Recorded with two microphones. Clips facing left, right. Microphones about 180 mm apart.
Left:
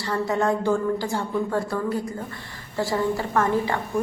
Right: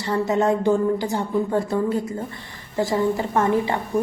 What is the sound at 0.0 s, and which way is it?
A woman's voice, 20° right (ahead or behind).